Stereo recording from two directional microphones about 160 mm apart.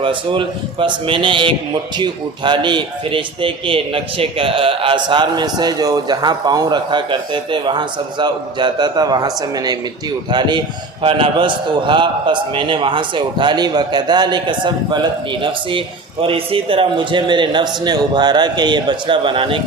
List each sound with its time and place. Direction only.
0.0 s a man's voice: 30° right (ahead or behind)
16.2 s a man's voice: 35° right (ahead or behind)